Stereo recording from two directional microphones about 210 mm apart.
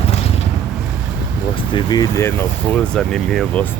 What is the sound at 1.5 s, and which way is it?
Speech, 20° left (ahead or behind).